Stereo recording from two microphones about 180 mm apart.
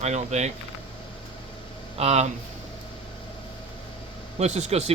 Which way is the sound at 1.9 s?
35° right (ahead or behind).